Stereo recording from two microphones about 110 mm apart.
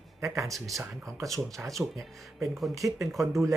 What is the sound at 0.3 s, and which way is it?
Speech, 30° right (ahead or behind).